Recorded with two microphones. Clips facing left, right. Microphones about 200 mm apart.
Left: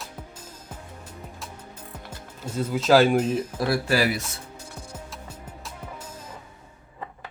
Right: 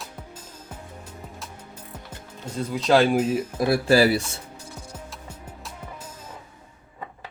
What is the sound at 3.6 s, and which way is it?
Speech, 25° right (ahead or behind).